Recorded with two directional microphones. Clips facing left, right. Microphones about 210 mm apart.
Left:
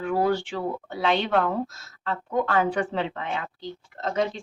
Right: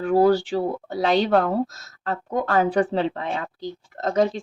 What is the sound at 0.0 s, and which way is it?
Speech, 35° right (ahead or behind).